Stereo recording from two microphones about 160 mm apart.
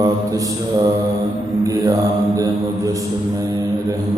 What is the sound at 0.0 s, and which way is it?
Mantra, 20° right (ahead or behind).